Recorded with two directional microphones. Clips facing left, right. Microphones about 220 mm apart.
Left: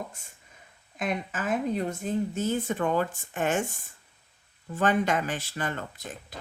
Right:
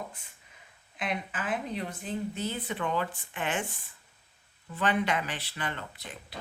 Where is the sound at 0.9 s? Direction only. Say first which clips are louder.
Left 4 dB; 45° left (ahead or behind).